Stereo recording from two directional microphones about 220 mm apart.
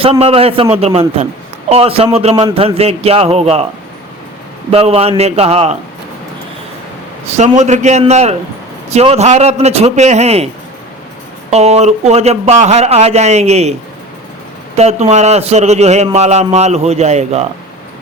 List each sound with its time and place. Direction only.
0.0 s a man's voice: 25° right (ahead or behind)
4.7 s a man's voice: 25° right (ahead or behind)
7.3 s a man's voice: 30° right (ahead or behind)
11.5 s a man's voice: 30° right (ahead or behind)
14.8 s a man's voice: 30° right (ahead or behind)